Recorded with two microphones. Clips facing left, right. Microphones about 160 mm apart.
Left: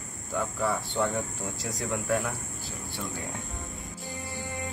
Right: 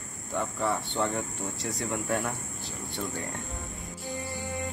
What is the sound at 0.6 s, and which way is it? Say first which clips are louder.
Speech: left 1 dB; centre (ahead or behind).